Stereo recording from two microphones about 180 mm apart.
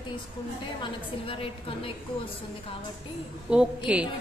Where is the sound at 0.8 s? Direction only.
30° left (ahead or behind).